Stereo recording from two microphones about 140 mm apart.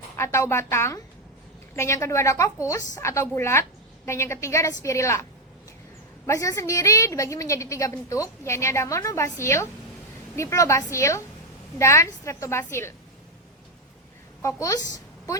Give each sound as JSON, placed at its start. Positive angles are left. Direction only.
{"t": 0.2, "sound": "a woman's voice", "side_deg": 20}
{"t": 6.2, "sound": "a woman's voice", "side_deg": 25}
{"t": 14.4, "sound": "a woman's voice", "side_deg": 25}